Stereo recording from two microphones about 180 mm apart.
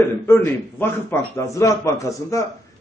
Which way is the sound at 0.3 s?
10° left (ahead or behind).